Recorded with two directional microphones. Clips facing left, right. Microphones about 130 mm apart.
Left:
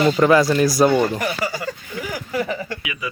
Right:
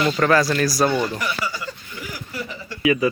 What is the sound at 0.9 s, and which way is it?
Speech, 45° left (ahead or behind).